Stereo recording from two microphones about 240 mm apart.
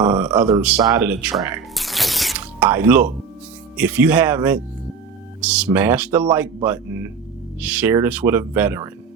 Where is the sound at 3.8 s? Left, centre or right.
Centre.